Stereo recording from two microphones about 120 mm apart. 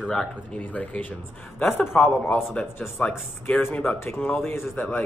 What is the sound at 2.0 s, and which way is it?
Speech, 15° left (ahead or behind).